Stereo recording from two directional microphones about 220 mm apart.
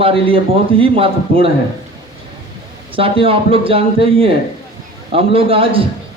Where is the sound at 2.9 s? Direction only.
25° right (ahead or behind).